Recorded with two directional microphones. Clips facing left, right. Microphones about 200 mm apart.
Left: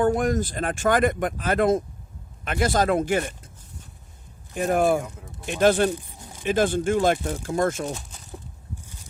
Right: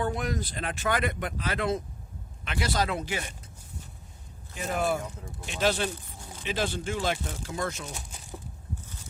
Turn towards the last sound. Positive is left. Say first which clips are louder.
# left 9 dB
turn(degrees=50)  # may be behind; listen again after turning